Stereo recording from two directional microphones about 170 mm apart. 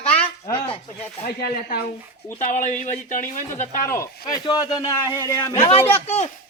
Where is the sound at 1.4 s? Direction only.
65° left (ahead or behind).